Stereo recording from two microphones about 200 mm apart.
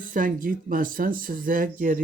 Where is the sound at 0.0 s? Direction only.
40° right (ahead or behind).